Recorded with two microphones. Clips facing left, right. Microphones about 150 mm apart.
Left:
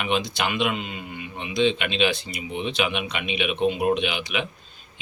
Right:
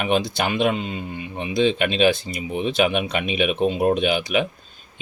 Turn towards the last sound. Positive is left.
turn(degrees=-45)  # may be behind; listen again after turning